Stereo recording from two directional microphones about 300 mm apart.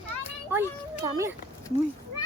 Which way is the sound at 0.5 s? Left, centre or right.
Centre.